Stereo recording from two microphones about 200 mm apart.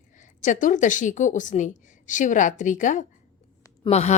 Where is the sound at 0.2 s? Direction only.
40° left (ahead or behind).